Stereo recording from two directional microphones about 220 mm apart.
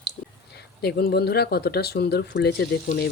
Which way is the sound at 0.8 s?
45° left (ahead or behind).